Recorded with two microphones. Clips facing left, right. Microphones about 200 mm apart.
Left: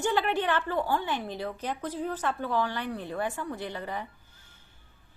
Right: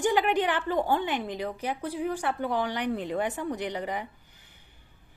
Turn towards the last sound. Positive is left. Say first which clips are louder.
# right 2 dB
turn(degrees=-15)  # may be behind; listen again after turning